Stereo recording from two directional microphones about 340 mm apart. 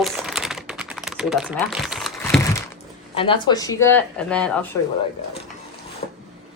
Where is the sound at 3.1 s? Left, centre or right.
Centre.